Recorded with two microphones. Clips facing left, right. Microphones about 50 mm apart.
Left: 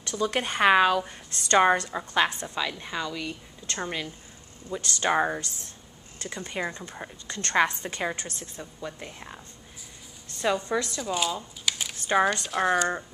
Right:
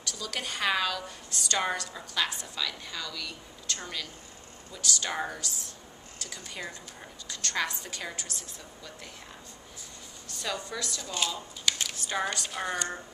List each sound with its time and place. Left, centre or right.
0.0 s a woman's voice: left
10.4 s a woman's voice: left
11.0 s speech: centre
11.7 s a sound: centre
12.4 s speech: centre